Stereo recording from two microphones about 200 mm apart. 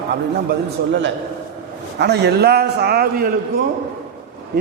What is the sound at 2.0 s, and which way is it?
A man's voice, 55° right (ahead or behind).